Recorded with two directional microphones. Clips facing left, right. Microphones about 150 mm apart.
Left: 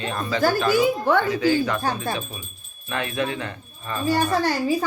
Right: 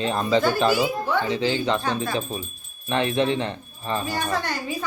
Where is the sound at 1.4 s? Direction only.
25° right (ahead or behind).